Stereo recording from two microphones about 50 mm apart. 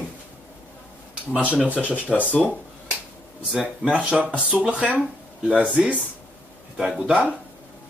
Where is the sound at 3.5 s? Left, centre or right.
Centre.